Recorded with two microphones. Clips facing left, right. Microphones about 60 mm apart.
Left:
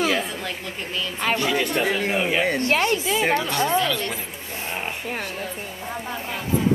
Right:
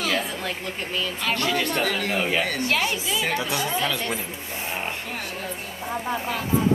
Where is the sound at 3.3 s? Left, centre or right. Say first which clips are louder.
Left 4 dB; centre.